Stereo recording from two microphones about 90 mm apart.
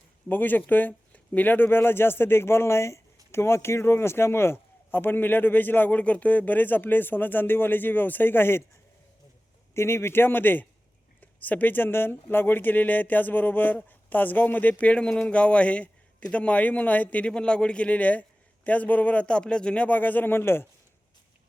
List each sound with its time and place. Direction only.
0.3 s a man's voice: 20° left (ahead or behind)
9.7 s a man's voice: 30° left (ahead or behind)